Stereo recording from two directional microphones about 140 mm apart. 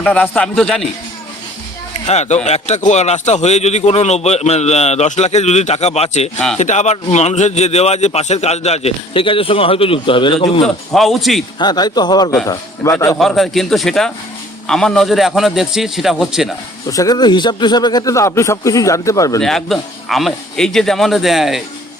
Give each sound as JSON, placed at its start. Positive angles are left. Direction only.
{"t": 0.0, "sound": "a man's voice", "side_deg": 10}
{"t": 2.0, "sound": "speech", "side_deg": 55}
{"t": 10.9, "sound": "a man's voice", "side_deg": 0}
{"t": 11.6, "sound": "speech", "side_deg": 30}
{"t": 13.1, "sound": "a man's voice", "side_deg": 0}
{"t": 16.9, "sound": "speech", "side_deg": 25}
{"t": 19.4, "sound": "a man's voice", "side_deg": 5}